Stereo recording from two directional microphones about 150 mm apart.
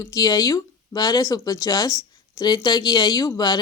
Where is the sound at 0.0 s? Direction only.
25° left (ahead or behind).